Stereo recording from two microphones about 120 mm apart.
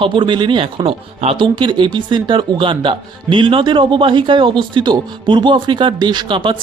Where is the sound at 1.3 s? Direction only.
40° right (ahead or behind).